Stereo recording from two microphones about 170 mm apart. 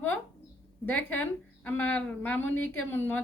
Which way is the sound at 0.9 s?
10° left (ahead or behind).